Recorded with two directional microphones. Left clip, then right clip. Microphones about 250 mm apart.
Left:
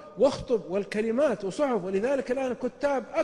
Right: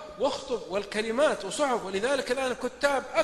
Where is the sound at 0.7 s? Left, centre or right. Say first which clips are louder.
Left 1 dB; left.